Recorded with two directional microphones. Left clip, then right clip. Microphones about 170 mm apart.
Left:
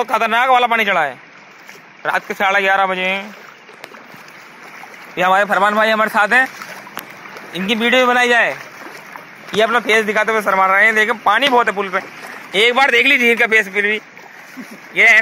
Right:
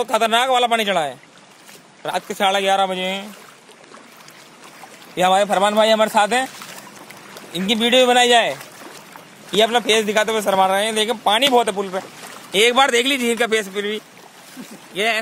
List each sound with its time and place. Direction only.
0.0 s a man's voice: 20° right (ahead or behind)
5.1 s speech: 20° right (ahead or behind)
7.5 s speech: 20° right (ahead or behind)
9.6 s speech: 25° right (ahead or behind)
12.5 s a man's voice: 35° right (ahead or behind); by 14.0 s 15° right (ahead or behind)